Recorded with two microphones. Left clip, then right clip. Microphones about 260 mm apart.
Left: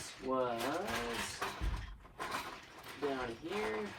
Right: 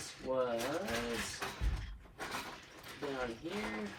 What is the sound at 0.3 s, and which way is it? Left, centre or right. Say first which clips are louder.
Speech: right 1 dB; left.